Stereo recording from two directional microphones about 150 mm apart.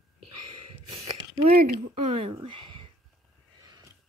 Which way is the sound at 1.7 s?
40° right (ahead or behind).